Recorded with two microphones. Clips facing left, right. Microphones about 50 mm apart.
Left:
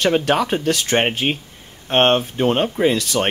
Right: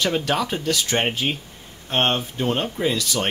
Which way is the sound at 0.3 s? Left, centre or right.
Left.